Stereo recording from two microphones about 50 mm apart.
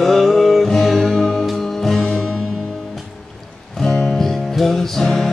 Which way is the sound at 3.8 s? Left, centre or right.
Centre.